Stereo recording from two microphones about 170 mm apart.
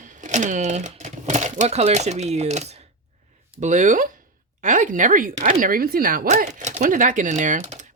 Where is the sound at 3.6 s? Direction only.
45° right (ahead or behind).